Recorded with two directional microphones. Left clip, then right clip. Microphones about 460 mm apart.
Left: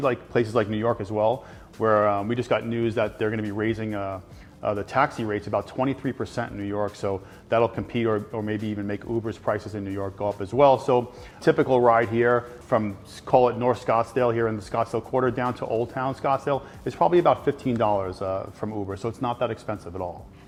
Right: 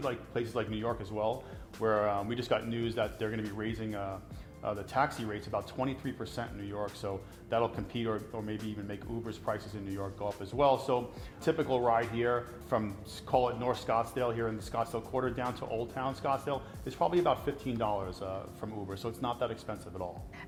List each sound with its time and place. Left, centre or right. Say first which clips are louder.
0.0 s speech: left 12 dB; left